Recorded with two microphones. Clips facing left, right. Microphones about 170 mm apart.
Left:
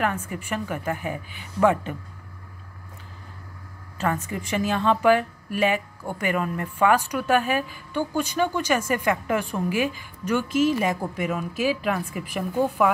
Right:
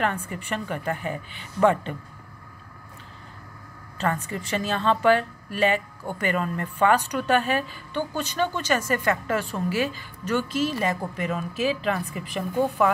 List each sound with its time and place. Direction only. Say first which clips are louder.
0.0 s speech: left 1 dB; 10° left (ahead or behind)
4.3 s speech: left 2 dB; 10° left (ahead or behind)